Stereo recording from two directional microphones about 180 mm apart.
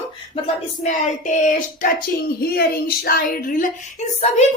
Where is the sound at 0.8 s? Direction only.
40° left (ahead or behind).